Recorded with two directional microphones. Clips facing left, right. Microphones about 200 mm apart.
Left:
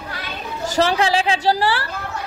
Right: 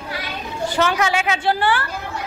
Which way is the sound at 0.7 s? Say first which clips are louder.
Left 2 dB; 35° left (ahead or behind).